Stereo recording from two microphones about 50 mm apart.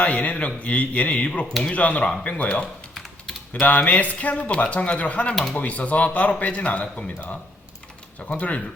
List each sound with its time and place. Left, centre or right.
0.0 s speech: left
3.7 s speech: left
5.3 s speech: centre
5.5 s speech: left
8.3 s speech: left